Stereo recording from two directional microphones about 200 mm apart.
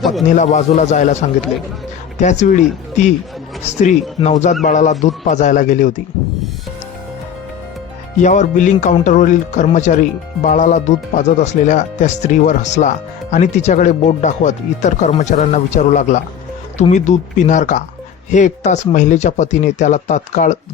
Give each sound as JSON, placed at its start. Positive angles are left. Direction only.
{"t": 0.0, "sound": "speech", "side_deg": 0}
{"t": 0.3, "sound": "speech", "side_deg": 35}
{"t": 3.7, "sound": "speech", "side_deg": 35}
{"t": 8.2, "sound": "speech", "side_deg": 40}